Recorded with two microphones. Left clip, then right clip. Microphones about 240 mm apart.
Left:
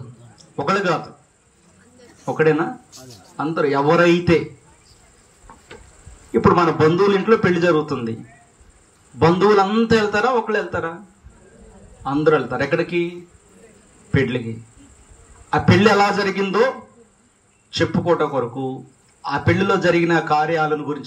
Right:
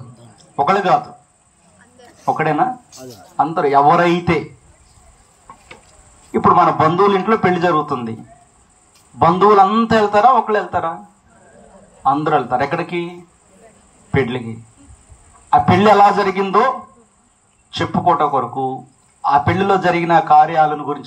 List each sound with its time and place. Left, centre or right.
0.4 s a man's voice: centre
2.0 s a sound: centre
3.3 s a man's voice: centre
6.3 s a man's voice: centre
9.2 s a man's voice: centre
12.0 s a man's voice: centre
14.1 s a man's voice: centre
15.5 s a man's voice: centre